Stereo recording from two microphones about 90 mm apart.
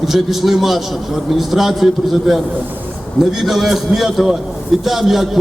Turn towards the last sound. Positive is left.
turn(degrees=-5)  # may be behind; listen again after turning